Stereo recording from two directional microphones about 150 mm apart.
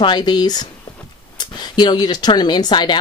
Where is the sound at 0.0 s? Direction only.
30° left (ahead or behind).